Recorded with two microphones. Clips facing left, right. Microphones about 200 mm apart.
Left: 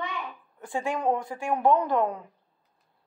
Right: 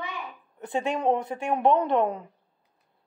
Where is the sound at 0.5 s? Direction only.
20° right (ahead or behind).